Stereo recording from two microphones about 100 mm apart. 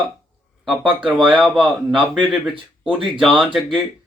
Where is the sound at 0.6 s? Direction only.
Centre (ahead or behind).